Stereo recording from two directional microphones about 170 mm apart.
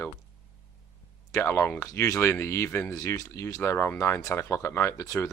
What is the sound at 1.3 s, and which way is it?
Speech, 15° left (ahead or behind).